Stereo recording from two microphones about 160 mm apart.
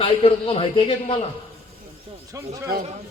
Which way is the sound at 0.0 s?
35° left (ahead or behind).